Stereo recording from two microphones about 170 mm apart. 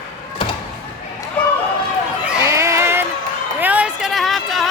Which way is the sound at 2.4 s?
15° right (ahead or behind).